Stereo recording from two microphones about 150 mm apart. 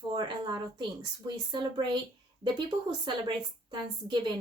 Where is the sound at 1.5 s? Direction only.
30° right (ahead or behind).